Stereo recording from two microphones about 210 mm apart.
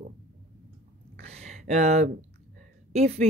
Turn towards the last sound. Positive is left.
turn(degrees=-30)  # may be behind; listen again after turning